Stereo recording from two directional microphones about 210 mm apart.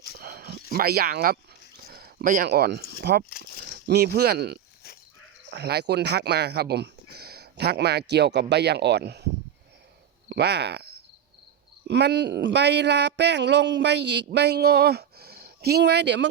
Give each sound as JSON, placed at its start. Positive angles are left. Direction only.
{"t": 0.2, "sound": "a sound", "side_deg": -45}
{"t": 0.7, "sound": "speech", "side_deg": -45}
{"t": 10.2, "sound": "speech", "side_deg": -50}
{"t": 11.9, "sound": "speech", "side_deg": -55}